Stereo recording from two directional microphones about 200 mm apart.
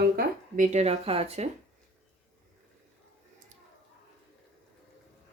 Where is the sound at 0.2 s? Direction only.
40° right (ahead or behind).